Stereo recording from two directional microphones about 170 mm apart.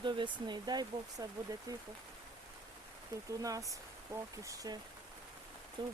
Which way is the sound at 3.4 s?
20° right (ahead or behind).